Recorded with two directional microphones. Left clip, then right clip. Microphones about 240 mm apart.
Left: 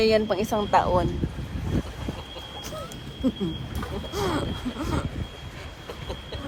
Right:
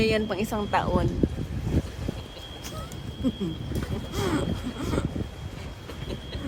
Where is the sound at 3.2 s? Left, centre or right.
Centre.